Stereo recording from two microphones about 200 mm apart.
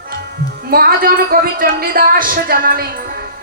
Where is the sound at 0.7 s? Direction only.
45° right (ahead or behind).